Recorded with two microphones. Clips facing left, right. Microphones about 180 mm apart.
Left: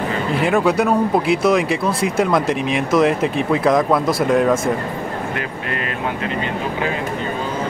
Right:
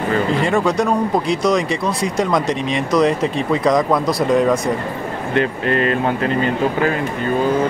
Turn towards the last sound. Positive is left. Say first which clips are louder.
# right 8 dB
turn(degrees=-35)  # may be behind; listen again after turning